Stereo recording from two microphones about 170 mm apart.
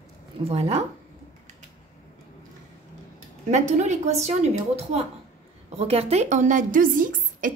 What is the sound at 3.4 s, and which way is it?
A woman's voice, 45° right (ahead or behind).